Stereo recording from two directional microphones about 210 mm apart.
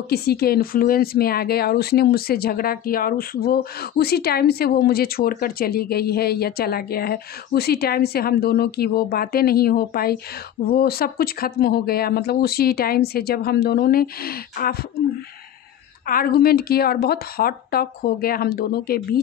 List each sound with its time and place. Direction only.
0.1 s speech: 50° left (ahead or behind)
16.1 s speech: 45° left (ahead or behind)